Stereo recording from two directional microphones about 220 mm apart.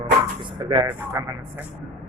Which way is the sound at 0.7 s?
20° right (ahead or behind).